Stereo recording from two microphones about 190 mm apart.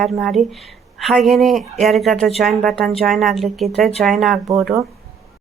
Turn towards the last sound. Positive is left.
turn(degrees=0)  # may be behind; listen again after turning